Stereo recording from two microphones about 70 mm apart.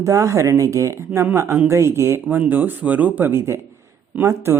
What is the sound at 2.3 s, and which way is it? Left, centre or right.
Speech, right.